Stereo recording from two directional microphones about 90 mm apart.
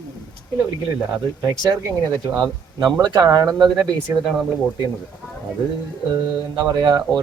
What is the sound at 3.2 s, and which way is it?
Speech, 45° right (ahead or behind).